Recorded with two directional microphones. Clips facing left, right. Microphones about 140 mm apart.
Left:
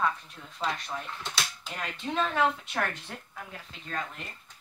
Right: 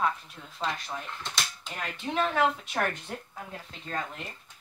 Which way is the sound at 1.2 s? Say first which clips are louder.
Even; 5° left (ahead or behind).